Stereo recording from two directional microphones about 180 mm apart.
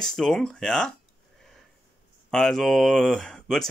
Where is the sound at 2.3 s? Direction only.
5° left (ahead or behind).